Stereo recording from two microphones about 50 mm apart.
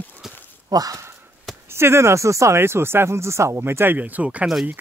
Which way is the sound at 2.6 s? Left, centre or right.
Right.